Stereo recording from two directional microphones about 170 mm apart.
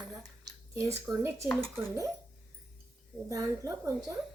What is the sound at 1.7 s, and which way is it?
Speech, 15° right (ahead or behind).